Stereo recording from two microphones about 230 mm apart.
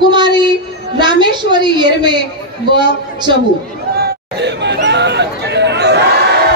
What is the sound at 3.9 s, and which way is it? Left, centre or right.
Chatter, right.